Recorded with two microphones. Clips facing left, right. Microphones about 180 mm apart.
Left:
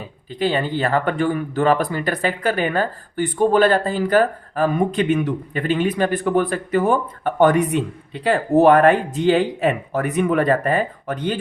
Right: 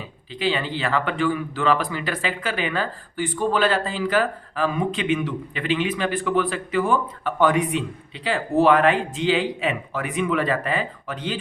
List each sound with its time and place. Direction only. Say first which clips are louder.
0.3 s speech: left 4 dB; 50° left (ahead or behind)